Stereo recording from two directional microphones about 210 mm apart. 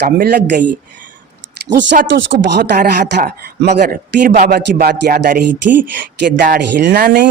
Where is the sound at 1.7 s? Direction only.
55° right (ahead or behind).